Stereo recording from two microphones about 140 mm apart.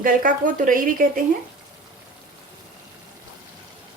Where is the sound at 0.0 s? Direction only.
75° right (ahead or behind).